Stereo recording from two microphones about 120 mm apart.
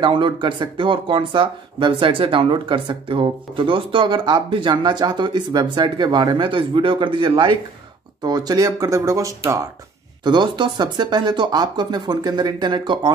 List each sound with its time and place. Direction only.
0.0 s speech: 45° right (ahead or behind); by 9.3 s 25° right (ahead or behind)
10.2 s speech: 40° right (ahead or behind)